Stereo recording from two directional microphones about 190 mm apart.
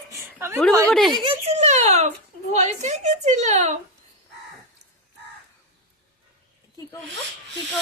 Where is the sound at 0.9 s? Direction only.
Centre (ahead or behind).